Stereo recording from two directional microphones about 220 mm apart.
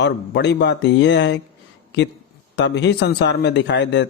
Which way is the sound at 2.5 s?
50° left (ahead or behind).